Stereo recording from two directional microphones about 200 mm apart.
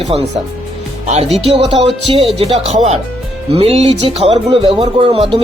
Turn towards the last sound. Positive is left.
turn(degrees=-30)  # may be behind; listen again after turning